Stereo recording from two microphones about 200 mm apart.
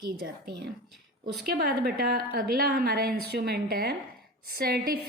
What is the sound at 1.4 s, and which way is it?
A woman's voice, 50° right (ahead or behind).